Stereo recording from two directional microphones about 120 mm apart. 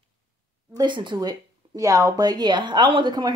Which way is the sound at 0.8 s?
40° right (ahead or behind).